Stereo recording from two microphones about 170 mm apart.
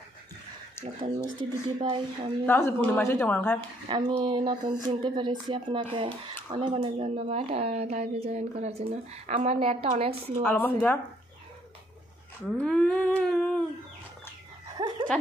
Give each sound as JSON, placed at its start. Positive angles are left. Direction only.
{"t": 0.8, "sound": "a sound", "side_deg": 15}
{"t": 1.4, "sound": "speech", "side_deg": -30}
{"t": 2.4, "sound": "a woman's voice", "side_deg": 10}
{"t": 3.9, "sound": "speech", "side_deg": -30}
{"t": 10.4, "sound": "a woman's voice", "side_deg": 10}
{"t": 12.4, "sound": "a woman's voice", "side_deg": 5}
{"t": 14.8, "sound": "dog", "side_deg": -25}